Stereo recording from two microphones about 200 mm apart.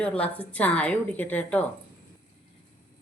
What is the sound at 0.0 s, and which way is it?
A woman's voice, 5° left (ahead or behind).